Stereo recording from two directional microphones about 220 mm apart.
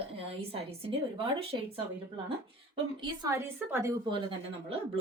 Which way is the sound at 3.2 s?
15° right (ahead or behind).